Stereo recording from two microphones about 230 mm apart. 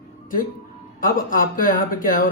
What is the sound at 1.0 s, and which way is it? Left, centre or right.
A man's voice, left.